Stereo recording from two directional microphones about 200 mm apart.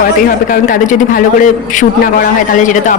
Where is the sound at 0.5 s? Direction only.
45° left (ahead or behind).